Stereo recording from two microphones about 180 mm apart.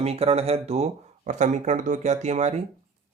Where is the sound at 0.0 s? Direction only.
35° right (ahead or behind).